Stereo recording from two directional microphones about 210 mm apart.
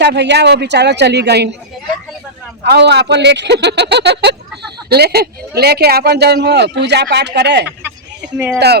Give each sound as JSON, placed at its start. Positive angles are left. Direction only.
{"t": 0.0, "sound": "speech", "side_deg": -55}
{"t": 2.6, "sound": "speech", "side_deg": -55}